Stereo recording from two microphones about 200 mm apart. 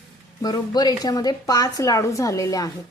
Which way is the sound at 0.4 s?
20° left (ahead or behind).